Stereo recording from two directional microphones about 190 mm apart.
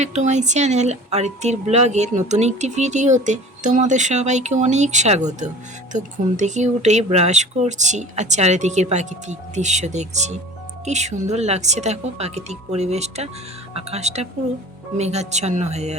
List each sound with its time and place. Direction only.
0.0 s a woman's voice: 35° right (ahead or behind)